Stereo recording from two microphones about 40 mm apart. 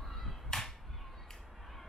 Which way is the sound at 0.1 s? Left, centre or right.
Centre.